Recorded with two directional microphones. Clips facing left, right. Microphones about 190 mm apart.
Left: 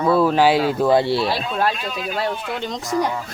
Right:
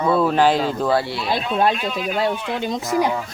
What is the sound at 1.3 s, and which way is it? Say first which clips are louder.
Speech: right 2 dB; 20° right (ahead or behind).